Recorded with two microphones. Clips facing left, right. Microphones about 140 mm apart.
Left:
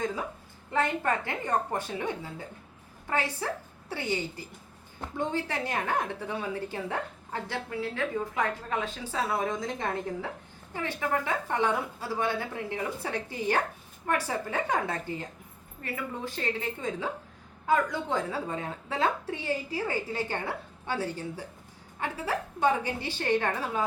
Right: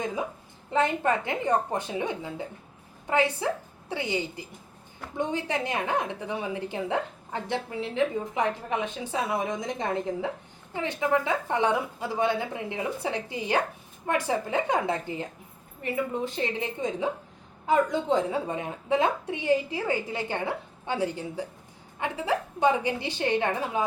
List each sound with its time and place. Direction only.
0.7 s a woman's voice: 20° right (ahead or behind)